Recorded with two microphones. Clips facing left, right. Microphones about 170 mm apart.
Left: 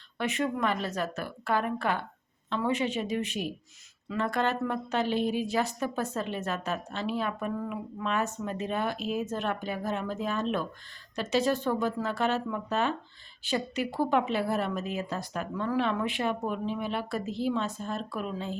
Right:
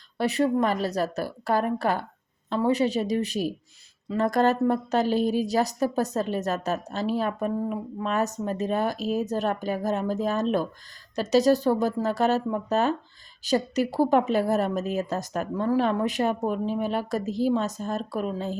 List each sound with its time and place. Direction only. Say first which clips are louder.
0.2 s a woman's voice: right 6 dB; 35° right (ahead or behind)